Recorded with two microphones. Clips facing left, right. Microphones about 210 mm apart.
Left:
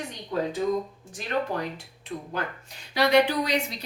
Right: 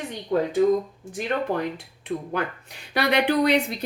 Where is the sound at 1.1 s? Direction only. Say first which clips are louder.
Right 4 dB; 55° right (ahead or behind).